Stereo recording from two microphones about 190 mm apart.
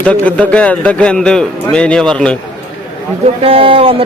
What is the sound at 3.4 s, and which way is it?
Speech, 30° right (ahead or behind).